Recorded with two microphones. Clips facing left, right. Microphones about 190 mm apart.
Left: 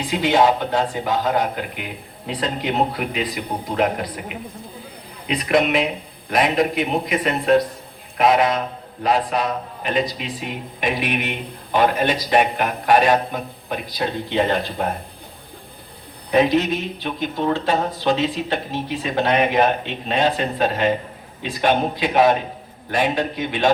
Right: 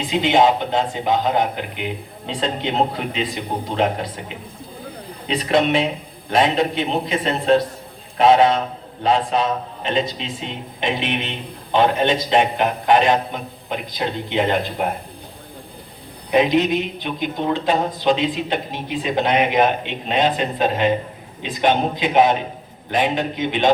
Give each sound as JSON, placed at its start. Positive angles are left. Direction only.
{"t": 0.0, "sound": "speech", "side_deg": -20}
{"t": 16.3, "sound": "a woman's voice", "side_deg": -15}